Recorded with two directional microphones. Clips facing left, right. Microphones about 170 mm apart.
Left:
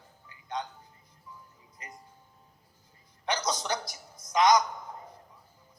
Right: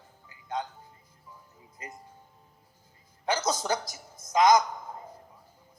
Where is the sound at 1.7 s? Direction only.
25° right (ahead or behind).